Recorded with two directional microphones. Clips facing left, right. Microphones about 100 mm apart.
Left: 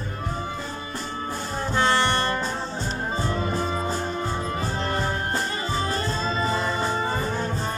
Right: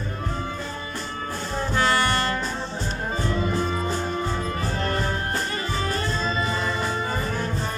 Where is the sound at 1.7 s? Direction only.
25° left (ahead or behind).